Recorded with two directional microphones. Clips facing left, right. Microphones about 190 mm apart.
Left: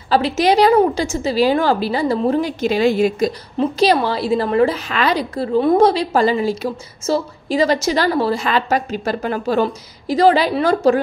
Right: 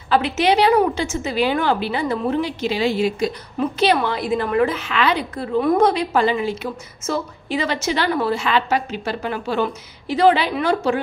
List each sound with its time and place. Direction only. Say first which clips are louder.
0.1 s a woman's voice: left 2 dB; 35° left (ahead or behind)
3.5 s a woman's voice: left 3 dB; 35° left (ahead or behind)